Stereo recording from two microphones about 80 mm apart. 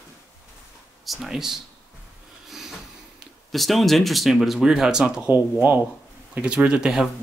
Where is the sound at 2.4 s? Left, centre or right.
Centre.